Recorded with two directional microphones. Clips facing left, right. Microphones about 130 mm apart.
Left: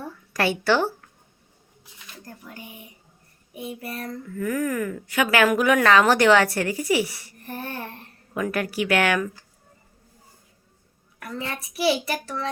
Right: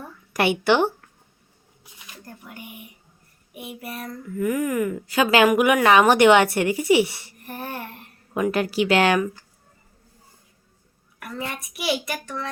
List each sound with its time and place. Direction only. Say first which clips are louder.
0.3 s a woman's voice: right 2 dB; 20° right (ahead or behind)
4.4 s speech: right 3 dB; 15° right (ahead or behind)
5.0 s a woman's voice: right 3 dB; 30° right (ahead or behind)
5.5 s a woman's voice: right 2 dB; 15° right (ahead or behind)
8.3 s a woman's voice: right 4 dB; 25° right (ahead or behind)
11.5 s a child's voice: left 5 dB; 30° left (ahead or behind)